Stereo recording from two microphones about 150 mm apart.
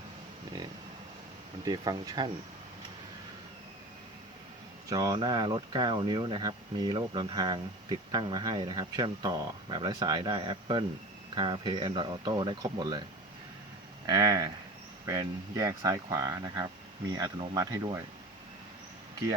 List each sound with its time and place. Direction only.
1.6 s speech: 25° right (ahead or behind)
4.9 s speech: 25° right (ahead or behind)
14.1 s speech: 25° right (ahead or behind)